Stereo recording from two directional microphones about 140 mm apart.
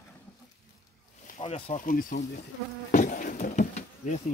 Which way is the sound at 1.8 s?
75° left (ahead or behind).